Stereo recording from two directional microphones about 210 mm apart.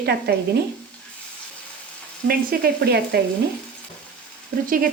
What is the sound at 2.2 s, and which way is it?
Speech, 45° right (ahead or behind).